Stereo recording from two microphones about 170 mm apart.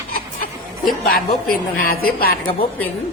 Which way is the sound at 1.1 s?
55° left (ahead or behind).